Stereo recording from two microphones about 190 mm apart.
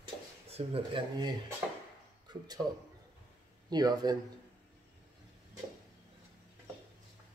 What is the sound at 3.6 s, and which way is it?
Speech, 20° right (ahead or behind).